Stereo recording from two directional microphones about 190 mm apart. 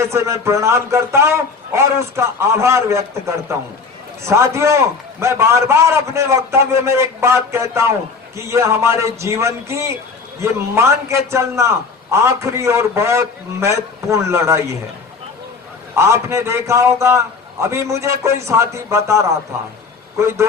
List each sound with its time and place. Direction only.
0.0 s a man's voice: 15° right (ahead or behind)
16.0 s a man's voice: 15° right (ahead or behind)